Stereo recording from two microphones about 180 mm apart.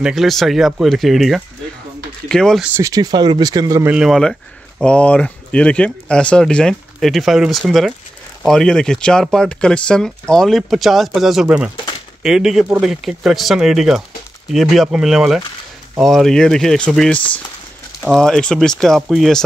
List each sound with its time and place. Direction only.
0.0 s speech: centre (ahead or behind)
2.6 s speech: 15° right (ahead or behind)
3.9 s speech: centre (ahead or behind)